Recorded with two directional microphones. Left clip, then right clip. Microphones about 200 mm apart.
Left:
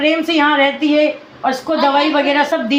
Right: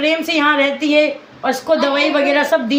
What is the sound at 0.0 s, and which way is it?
A woman's voice, 15° right (ahead or behind).